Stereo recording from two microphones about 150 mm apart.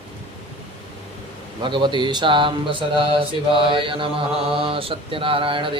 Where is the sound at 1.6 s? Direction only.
30° right (ahead or behind).